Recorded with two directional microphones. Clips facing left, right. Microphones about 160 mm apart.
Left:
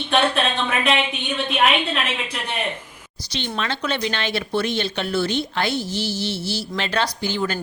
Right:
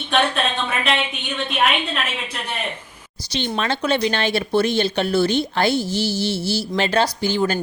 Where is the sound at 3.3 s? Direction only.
40° right (ahead or behind).